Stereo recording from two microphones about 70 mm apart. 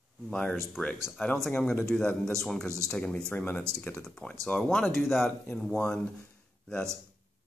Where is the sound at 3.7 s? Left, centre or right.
Right.